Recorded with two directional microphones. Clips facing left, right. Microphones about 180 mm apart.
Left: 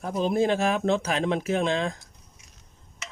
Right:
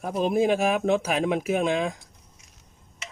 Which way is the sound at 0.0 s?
10° right (ahead or behind).